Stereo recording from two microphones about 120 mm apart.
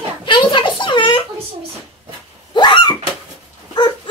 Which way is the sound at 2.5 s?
40° left (ahead or behind).